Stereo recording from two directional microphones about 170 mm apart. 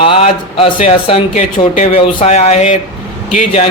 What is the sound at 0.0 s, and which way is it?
Speech, 30° left (ahead or behind).